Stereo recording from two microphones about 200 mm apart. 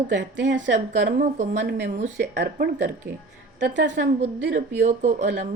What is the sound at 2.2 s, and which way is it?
Speech, 55° right (ahead or behind).